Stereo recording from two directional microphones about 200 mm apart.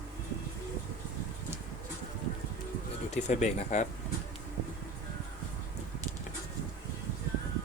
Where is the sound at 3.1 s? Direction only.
35° left (ahead or behind).